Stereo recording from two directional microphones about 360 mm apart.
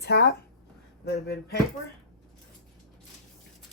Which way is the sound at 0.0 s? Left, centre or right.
Left.